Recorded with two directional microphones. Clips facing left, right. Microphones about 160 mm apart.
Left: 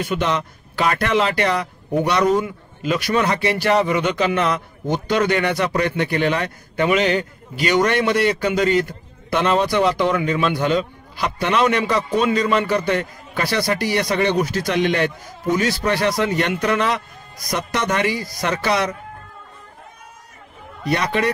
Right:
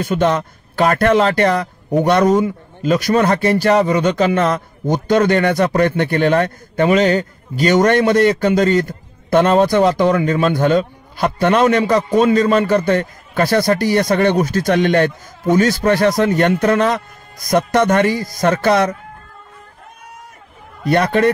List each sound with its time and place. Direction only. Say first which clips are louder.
0.0 s a man's voice: right 5 dB; 45° right (ahead or behind)
20.9 s a man's voice: right 6 dB; 50° right (ahead or behind)